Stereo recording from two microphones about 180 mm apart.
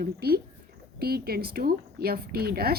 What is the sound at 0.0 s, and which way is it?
Speech, 60° right (ahead or behind).